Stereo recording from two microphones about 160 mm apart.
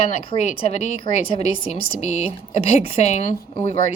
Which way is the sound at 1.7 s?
40° left (ahead or behind).